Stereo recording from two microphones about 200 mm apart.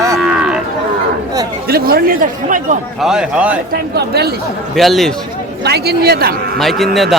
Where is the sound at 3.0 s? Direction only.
5° right (ahead or behind).